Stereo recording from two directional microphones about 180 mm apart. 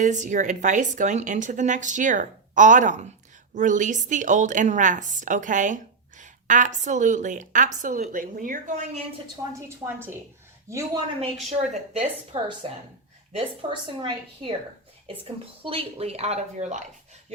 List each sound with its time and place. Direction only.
0.0 s a woman's voice: 45° right (ahead or behind)
9.6 s a woman's voice: 15° right (ahead or behind)
11.2 s a woman's voice: 35° right (ahead or behind)